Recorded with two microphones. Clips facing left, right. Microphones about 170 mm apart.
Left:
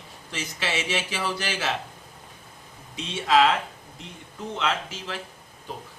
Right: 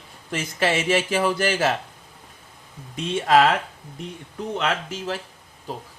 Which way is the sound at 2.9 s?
50° right (ahead or behind).